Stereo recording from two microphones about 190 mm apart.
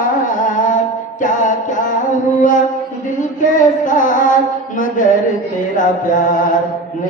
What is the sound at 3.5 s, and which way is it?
Music, 45° left (ahead or behind).